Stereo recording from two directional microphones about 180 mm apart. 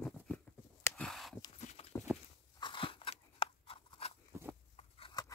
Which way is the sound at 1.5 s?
40° left (ahead or behind).